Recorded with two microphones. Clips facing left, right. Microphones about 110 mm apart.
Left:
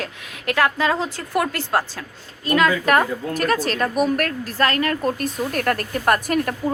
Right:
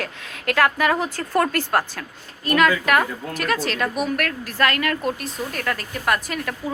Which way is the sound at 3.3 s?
45° left (ahead or behind).